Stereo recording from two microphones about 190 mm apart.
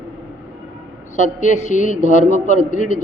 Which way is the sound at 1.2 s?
40° left (ahead or behind).